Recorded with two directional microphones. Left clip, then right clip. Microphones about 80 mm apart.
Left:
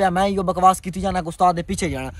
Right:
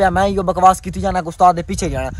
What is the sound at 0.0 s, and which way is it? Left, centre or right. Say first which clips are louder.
Speech: right 4 dB; centre.